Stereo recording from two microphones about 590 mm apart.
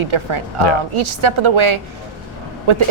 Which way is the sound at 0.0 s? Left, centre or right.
Right.